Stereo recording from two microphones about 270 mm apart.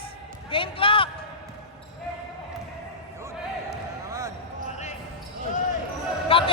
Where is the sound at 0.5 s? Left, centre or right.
Centre.